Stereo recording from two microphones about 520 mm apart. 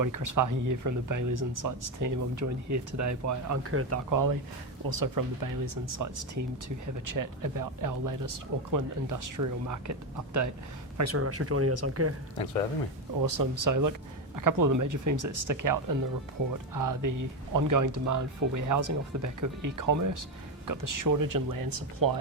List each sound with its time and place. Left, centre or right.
0.0 s speech: right
13.2 s speech: right